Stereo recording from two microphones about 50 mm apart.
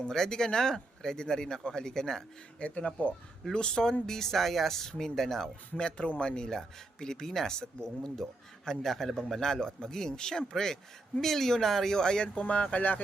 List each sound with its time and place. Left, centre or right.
0.0 s speech: centre
2.6 s speech: left
3.5 s speech: centre
5.7 s speech: centre
12.3 s speech: left